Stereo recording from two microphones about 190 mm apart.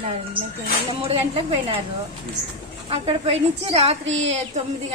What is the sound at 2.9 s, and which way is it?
A woman's voice, 30° right (ahead or behind).